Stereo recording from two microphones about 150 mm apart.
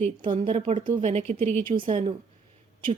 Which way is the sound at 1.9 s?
40° right (ahead or behind).